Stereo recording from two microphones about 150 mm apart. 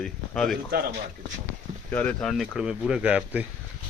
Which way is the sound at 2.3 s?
Centre (ahead or behind).